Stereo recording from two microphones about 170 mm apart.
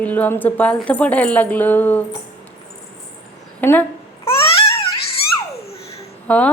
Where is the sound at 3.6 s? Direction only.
10° left (ahead or behind).